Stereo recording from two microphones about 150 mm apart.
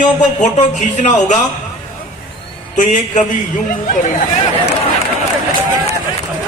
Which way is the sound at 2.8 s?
55° left (ahead or behind).